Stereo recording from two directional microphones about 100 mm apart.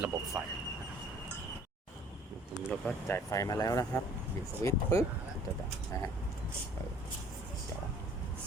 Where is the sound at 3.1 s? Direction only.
30° left (ahead or behind).